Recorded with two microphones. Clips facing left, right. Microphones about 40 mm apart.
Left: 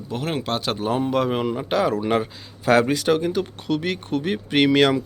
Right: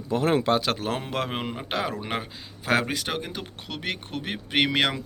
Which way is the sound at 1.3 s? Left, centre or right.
Right.